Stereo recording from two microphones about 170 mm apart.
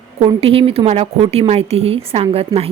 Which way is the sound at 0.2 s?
35° right (ahead or behind).